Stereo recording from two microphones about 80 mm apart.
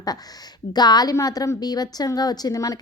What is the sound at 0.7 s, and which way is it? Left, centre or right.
A woman's voice, left.